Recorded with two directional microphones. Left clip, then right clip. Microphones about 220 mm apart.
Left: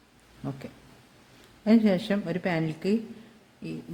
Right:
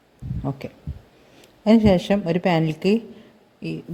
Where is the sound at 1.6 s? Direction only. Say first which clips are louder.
Right 7 dB; 30° right (ahead or behind).